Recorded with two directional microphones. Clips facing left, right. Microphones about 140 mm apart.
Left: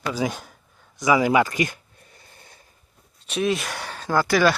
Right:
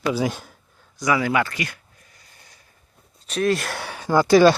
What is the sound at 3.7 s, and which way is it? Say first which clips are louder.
Speech: right 3 dB; 15° right (ahead or behind).